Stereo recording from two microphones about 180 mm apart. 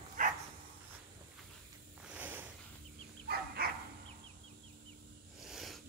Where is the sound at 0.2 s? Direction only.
45° right (ahead or behind).